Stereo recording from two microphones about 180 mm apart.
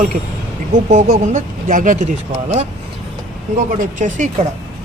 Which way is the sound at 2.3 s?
35° right (ahead or behind).